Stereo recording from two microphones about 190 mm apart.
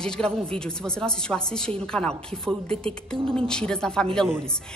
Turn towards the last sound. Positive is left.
turn(degrees=5)  # may be behind; listen again after turning